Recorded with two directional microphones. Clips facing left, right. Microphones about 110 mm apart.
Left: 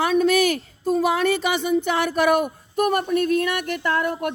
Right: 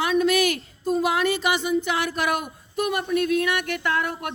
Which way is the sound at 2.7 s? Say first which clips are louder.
Left 3 dB; 50° left (ahead or behind).